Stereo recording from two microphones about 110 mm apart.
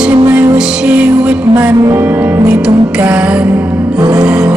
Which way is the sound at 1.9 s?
15° right (ahead or behind).